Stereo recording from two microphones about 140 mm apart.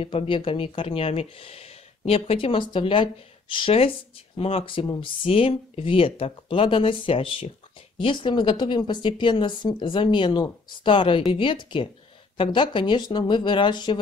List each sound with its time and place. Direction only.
0.0 s speech: 40° left (ahead or behind)